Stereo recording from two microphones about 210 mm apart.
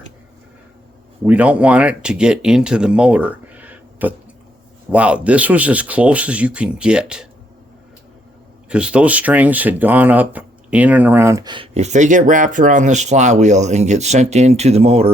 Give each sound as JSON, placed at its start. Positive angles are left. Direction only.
{"t": 1.2, "sound": "speech", "side_deg": -5}
{"t": 8.7, "sound": "speech", "side_deg": -5}